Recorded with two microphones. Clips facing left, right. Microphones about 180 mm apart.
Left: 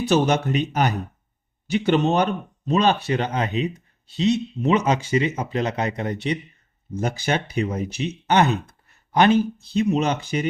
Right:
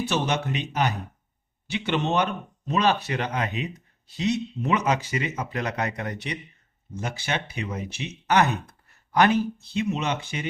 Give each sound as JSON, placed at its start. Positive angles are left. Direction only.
{"t": 0.0, "sound": "speech", "side_deg": 40}
{"t": 6.9, "sound": "speech", "side_deg": 40}